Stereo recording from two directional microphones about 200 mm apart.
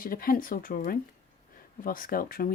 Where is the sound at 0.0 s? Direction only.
45° left (ahead or behind).